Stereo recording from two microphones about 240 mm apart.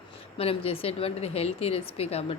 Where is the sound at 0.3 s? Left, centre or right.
Left.